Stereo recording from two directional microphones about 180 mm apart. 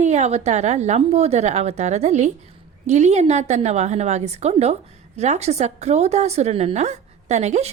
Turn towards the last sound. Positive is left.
turn(degrees=-40)  # may be behind; listen again after turning